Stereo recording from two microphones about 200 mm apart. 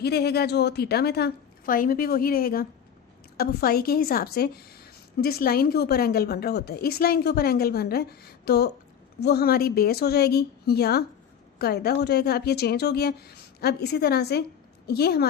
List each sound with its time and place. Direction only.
0.0 s a woman's voice: 55° left (ahead or behind)